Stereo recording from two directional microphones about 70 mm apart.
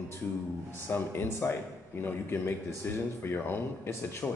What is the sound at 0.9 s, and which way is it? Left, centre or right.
A man's voice, left.